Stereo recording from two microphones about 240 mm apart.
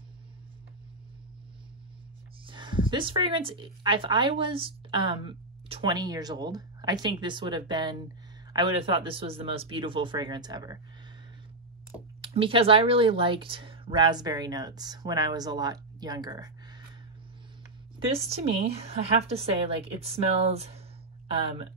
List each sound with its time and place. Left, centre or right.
2.4 s speech: centre
12.2 s speech: right
17.9 s speech: right